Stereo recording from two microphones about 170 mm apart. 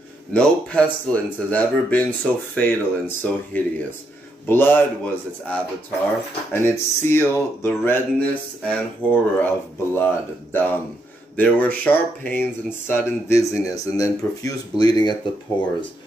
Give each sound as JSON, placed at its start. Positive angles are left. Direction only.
{"t": 0.3, "sound": "speech", "side_deg": 5}